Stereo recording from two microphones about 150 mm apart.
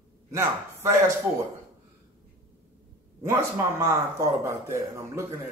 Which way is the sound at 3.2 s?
20° right (ahead or behind).